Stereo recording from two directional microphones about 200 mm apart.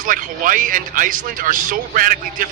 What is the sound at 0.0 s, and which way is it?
Speech, 45° right (ahead or behind).